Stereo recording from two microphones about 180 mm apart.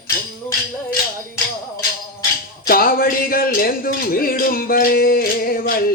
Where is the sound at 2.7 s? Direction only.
55° left (ahead or behind).